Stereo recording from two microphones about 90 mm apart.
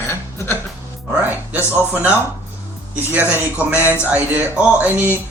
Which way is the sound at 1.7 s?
20° right (ahead or behind).